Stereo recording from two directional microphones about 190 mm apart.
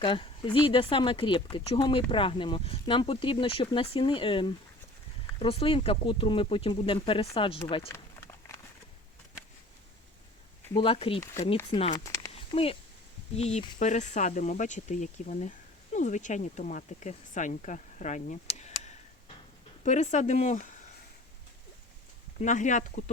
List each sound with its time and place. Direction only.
0.0 s speech: 25° left (ahead or behind)
10.8 s speech: 30° left (ahead or behind)
12.3 s a sound: 30° left (ahead or behind)
13.3 s speech: 35° left (ahead or behind)
22.4 s speech: 40° left (ahead or behind)